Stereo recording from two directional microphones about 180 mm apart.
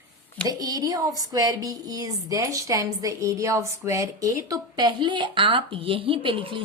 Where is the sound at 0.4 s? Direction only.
20° right (ahead or behind).